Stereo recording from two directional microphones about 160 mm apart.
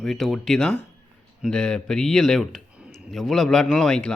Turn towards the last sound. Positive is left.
turn(degrees=5)  # may be behind; listen again after turning